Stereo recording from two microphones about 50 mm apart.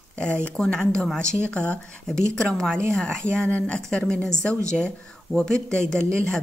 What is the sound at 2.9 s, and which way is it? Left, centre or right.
Speech, centre.